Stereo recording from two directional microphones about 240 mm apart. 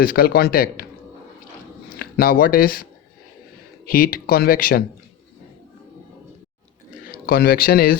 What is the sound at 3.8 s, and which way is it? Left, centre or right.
Speech, left.